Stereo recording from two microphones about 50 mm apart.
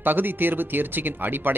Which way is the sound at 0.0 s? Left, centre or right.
Right.